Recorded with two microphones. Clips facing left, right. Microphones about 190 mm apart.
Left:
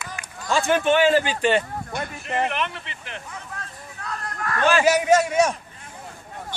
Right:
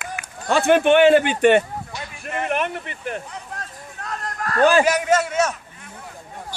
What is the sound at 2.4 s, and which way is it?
Speech, 50° right (ahead or behind).